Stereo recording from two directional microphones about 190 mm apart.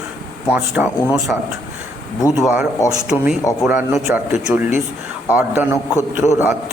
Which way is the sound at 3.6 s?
5° right (ahead or behind).